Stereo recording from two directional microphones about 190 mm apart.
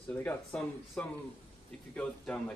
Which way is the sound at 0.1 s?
5° left (ahead or behind).